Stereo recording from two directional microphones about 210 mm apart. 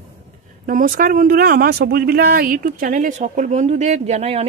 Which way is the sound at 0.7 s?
40° right (ahead or behind).